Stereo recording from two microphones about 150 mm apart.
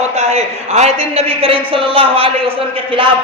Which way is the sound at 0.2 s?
45° right (ahead or behind).